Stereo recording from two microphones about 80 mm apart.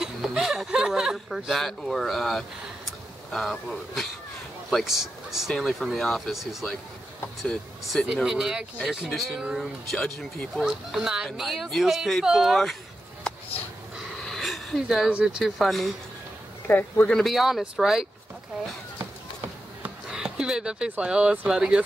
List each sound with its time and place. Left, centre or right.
0.0 s a sound: centre
4.6 s speech: centre
8.1 s speech: centre
9.9 s speech: centre
10.5 s speech: centre
14.2 s a sound: centre
15.0 s speech: centre
15.4 s speech: centre
16.6 s speech: left
17.1 s speech: centre
20.1 s a sound: centre
20.9 s speech: centre